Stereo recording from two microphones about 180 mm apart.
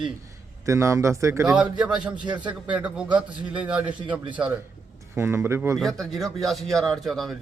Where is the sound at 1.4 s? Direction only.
5° right (ahead or behind).